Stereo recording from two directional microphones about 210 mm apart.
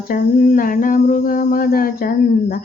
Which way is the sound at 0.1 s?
40° left (ahead or behind).